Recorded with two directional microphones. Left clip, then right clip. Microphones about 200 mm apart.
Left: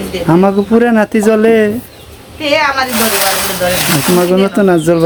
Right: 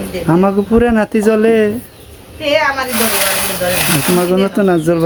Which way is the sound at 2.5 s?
15° right (ahead or behind).